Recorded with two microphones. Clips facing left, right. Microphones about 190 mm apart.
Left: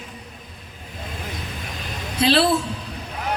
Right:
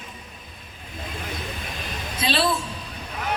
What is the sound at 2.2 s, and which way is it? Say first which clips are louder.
Speech: left 7 dB; 70° left (ahead or behind).